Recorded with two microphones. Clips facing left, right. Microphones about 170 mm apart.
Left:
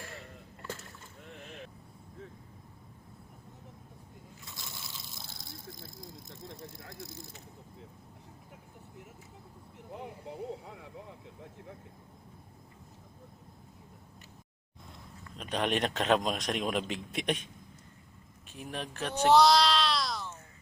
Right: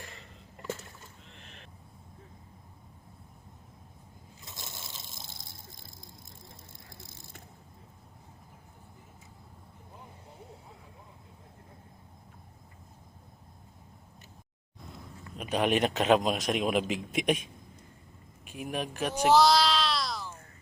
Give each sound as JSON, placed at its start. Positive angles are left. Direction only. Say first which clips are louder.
{"t": 1.2, "sound": "boat", "louder": "left 7 dB", "side_deg": 55}
{"t": 4.4, "sound": "biting", "louder": "right 3 dB", "side_deg": -20}
{"t": 4.9, "sound": "a sound", "louder": "even", "side_deg": -25}
{"t": 6.4, "sound": "vehicle", "louder": "left 8 dB", "side_deg": 90}
{"t": 9.9, "sound": "a sound", "louder": "left 10 dB", "side_deg": 75}
{"t": 15.4, "sound": "a man's voice", "louder": "right 4 dB", "side_deg": -5}
{"t": 19.3, "sound": "baby cry", "louder": "even", "side_deg": 0}